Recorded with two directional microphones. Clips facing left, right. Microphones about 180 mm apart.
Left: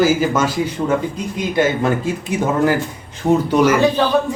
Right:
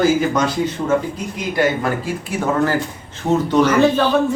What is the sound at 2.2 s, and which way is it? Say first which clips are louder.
Speech: left 2 dB; 15° left (ahead or behind).